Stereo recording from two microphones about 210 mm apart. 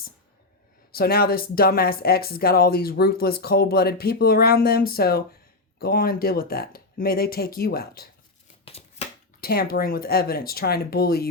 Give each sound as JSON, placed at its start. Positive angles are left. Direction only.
{"t": 0.9, "sound": "speech", "side_deg": 45}
{"t": 8.6, "sound": "scissors", "side_deg": 30}
{"t": 9.4, "sound": "speech", "side_deg": 45}